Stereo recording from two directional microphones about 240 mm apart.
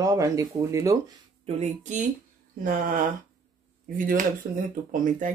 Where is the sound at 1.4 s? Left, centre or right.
Right.